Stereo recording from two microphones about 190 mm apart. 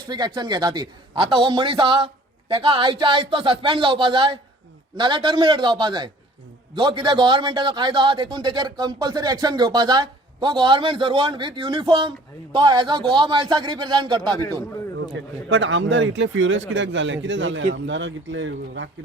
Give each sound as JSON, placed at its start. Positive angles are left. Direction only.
{"t": 0.1, "sound": "a man's voice", "side_deg": -20}
{"t": 15.1, "sound": "speech", "side_deg": -80}